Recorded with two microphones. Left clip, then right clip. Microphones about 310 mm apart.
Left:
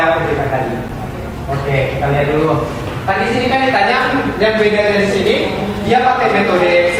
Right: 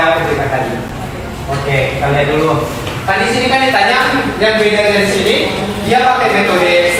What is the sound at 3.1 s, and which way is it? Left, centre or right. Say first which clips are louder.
Speech: right 2 dB; centre.